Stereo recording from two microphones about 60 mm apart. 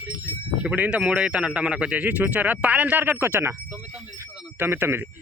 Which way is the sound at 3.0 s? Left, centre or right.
Right.